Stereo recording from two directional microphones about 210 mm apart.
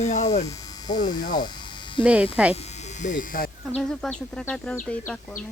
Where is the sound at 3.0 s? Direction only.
40° left (ahead or behind).